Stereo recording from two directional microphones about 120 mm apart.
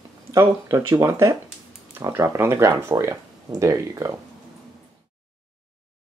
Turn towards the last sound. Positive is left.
turn(degrees=-25)  # may be behind; listen again after turning